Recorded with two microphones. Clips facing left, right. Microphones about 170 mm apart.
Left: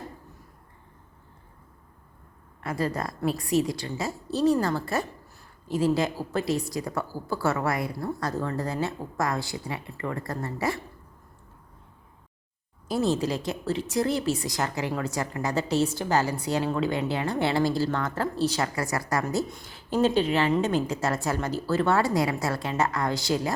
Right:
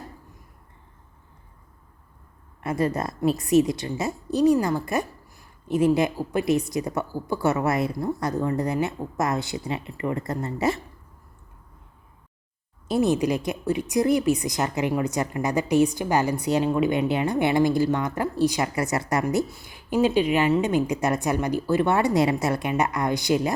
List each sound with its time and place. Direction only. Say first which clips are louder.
2.6 s a woman's voice: right 4 dB; 20° right (ahead or behind)
12.9 s a woman's voice: right 4 dB; 20° right (ahead or behind)